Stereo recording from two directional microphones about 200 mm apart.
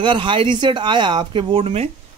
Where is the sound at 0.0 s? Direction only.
25° right (ahead or behind).